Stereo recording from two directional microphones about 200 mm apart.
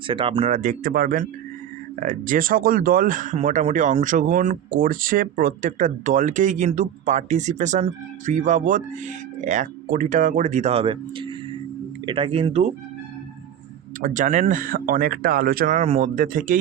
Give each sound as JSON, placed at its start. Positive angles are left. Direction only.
{"t": 0.1, "sound": "speech", "side_deg": -25}
{"t": 14.0, "sound": "speech", "side_deg": -40}